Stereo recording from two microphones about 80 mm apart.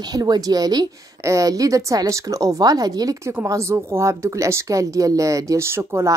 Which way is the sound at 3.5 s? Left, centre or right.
Right.